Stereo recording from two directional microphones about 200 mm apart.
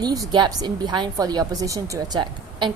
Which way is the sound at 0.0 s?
20° right (ahead or behind).